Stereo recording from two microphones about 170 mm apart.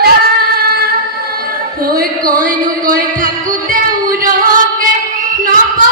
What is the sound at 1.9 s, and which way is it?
Music, 60° right (ahead or behind).